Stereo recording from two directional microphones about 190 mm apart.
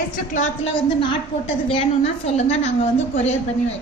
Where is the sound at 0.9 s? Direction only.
30° left (ahead or behind).